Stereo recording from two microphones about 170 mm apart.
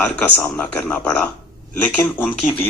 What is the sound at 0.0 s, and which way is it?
Speech, 15° left (ahead or behind).